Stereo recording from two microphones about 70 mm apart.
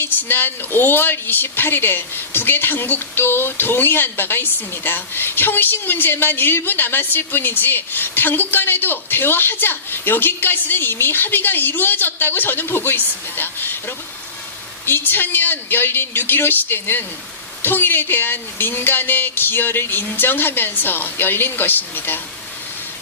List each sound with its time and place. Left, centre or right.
0.0 s a woman's voice: left